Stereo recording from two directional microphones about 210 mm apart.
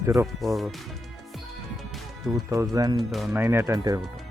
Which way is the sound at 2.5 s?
15° right (ahead or behind).